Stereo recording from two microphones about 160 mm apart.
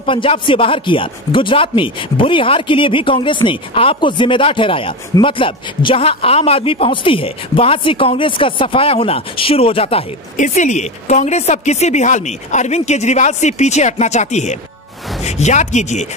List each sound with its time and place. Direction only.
0.0 s speech: 35° left (ahead or behind)
10.3 s speech: 50° left (ahead or behind)